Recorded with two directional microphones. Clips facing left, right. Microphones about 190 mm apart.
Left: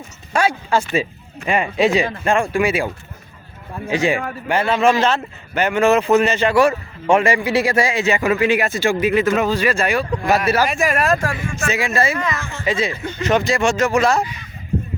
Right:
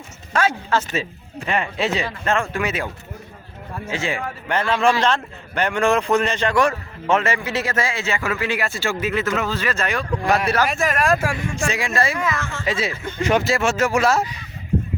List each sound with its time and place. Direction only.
0.3 s a man's voice: 10° left (ahead or behind); by 12.4 s 5° right (ahead or behind)
12.4 s a man's voice: 15° left (ahead or behind)
12.6 s speech: 5° right (ahead or behind)